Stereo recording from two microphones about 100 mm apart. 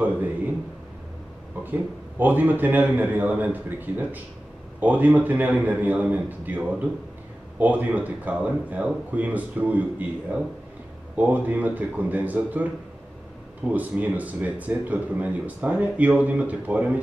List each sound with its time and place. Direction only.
1.6 s speech: 20° right (ahead or behind)
13.7 s speech: 15° right (ahead or behind)